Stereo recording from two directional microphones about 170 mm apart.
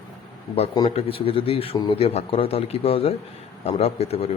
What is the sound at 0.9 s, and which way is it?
Speech, 35° left (ahead or behind).